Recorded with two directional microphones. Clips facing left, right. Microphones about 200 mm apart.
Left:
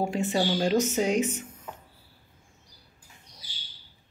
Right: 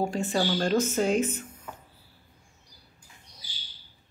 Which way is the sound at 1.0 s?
70° left (ahead or behind).